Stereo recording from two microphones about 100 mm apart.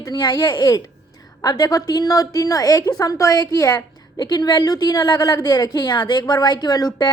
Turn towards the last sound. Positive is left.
turn(degrees=45)  # may be behind; listen again after turning